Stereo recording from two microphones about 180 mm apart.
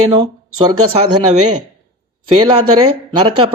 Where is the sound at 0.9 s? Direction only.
35° right (ahead or behind).